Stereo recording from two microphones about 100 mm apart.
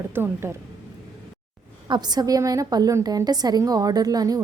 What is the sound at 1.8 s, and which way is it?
A woman's voice, 45° right (ahead or behind).